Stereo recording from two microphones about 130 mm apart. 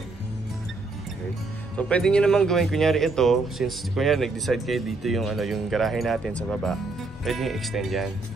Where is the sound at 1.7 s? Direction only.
10° left (ahead or behind).